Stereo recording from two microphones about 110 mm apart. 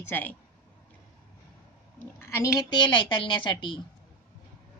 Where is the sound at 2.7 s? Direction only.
45° left (ahead or behind).